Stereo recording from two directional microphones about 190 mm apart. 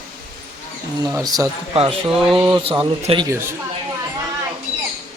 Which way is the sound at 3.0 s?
30° right (ahead or behind).